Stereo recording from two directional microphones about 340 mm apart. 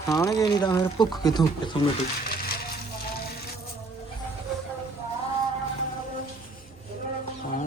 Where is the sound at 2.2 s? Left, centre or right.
Left.